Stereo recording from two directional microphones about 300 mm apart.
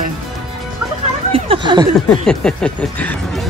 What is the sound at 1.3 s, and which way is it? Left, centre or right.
Speech, centre.